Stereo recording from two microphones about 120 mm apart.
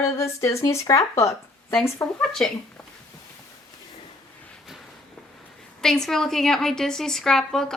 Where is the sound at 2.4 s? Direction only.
10° left (ahead or behind).